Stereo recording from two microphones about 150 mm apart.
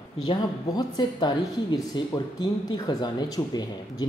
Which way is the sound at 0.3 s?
30° left (ahead or behind).